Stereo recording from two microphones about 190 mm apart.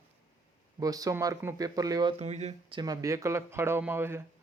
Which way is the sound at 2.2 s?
35° right (ahead or behind).